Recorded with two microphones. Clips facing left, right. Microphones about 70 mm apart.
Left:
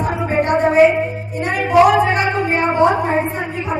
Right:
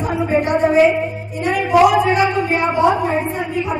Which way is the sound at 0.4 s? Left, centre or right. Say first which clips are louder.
Left 2 dB; left.